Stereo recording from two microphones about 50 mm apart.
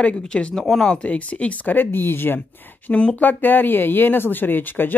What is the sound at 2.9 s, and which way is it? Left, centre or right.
Speech, left.